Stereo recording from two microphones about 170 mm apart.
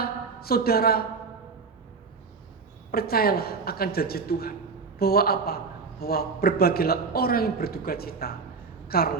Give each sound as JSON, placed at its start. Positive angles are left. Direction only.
{"t": 0.0, "sound": "a woman's voice", "side_deg": 65}
{"t": 2.9, "sound": "a man's voice", "side_deg": 65}